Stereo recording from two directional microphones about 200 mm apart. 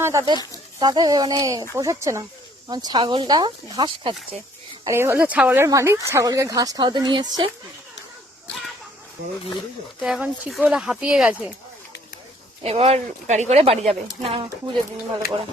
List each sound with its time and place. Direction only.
0.0 s a woman's voice: 15° right (ahead or behind)
4.9 s a woman's voice: 10° right (ahead or behind)
10.0 s speech: 5° right (ahead or behind)
12.6 s speech: 30° right (ahead or behind)